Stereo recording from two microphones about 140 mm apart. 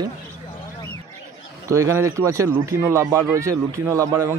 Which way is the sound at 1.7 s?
20° right (ahead or behind).